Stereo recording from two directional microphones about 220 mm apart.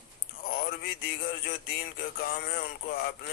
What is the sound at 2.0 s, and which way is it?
Speech, 40° left (ahead or behind).